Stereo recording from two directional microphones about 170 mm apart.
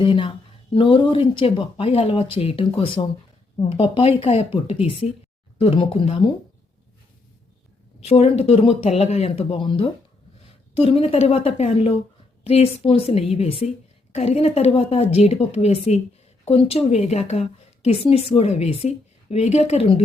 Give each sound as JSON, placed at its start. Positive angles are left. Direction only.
{"t": 0.0, "sound": "a woman's voice", "side_deg": 30}
{"t": 8.0, "sound": "a woman's voice", "side_deg": 40}